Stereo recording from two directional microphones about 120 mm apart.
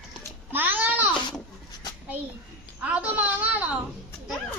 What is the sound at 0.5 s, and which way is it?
Babbling, 15° right (ahead or behind).